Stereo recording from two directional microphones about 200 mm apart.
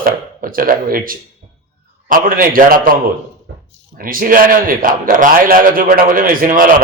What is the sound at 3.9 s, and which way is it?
A man's voice, 45° right (ahead or behind).